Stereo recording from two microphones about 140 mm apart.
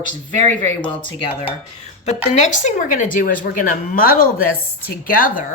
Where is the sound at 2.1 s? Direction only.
60° left (ahead or behind).